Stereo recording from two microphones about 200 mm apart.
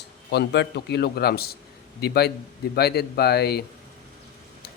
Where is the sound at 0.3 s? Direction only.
55° left (ahead or behind).